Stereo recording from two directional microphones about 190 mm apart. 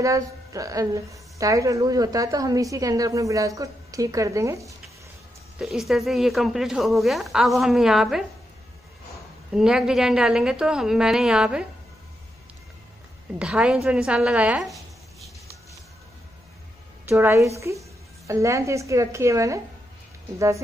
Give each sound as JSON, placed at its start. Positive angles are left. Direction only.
{"t": 0.0, "sound": "a woman's voice", "side_deg": -15}
{"t": 5.6, "sound": "a woman's voice", "side_deg": 0}
{"t": 9.5, "sound": "a woman's voice", "side_deg": -5}
{"t": 13.3, "sound": "a woman's voice", "side_deg": -5}
{"t": 13.8, "sound": "a sound", "side_deg": -5}
{"t": 17.1, "sound": "a woman's voice", "side_deg": -10}